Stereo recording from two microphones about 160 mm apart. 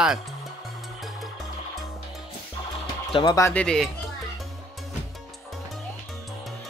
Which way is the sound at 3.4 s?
15° left (ahead or behind).